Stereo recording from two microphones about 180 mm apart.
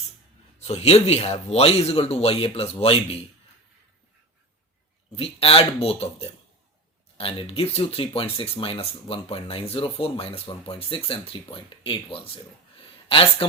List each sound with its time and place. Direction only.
0.6 s speech: 35° left (ahead or behind)
5.1 s speech: 30° left (ahead or behind)